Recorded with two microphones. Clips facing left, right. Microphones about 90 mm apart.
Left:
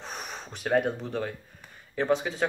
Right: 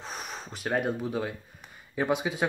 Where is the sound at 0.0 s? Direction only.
Centre (ahead or behind).